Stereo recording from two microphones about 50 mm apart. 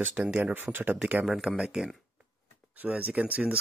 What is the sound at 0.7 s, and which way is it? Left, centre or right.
Speech, right.